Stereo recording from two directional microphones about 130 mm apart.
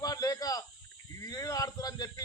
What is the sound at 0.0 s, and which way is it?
Snake, 30° left (ahead or behind).